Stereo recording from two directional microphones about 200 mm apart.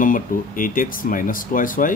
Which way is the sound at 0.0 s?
45° left (ahead or behind).